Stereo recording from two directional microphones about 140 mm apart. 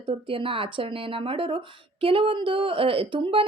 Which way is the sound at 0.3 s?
40° right (ahead or behind).